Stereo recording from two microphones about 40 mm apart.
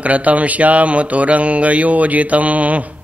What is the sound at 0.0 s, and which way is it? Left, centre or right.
Speech, right.